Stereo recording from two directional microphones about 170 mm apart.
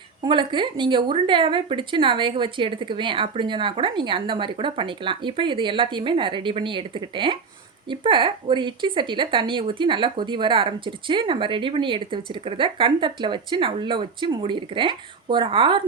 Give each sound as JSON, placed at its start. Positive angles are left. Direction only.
{"t": 0.2, "sound": "speech", "side_deg": -30}